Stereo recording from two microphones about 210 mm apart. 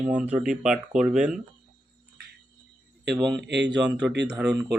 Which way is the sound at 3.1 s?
Centre (ahead or behind).